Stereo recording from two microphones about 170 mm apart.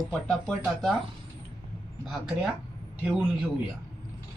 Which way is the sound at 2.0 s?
Centre (ahead or behind).